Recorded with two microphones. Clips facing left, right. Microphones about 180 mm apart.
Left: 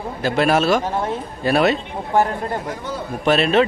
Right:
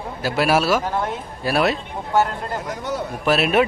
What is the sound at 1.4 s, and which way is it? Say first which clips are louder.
Speech: left 3 dB; centre (ahead or behind).